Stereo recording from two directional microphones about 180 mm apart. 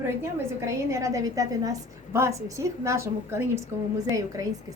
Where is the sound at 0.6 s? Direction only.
15° right (ahead or behind).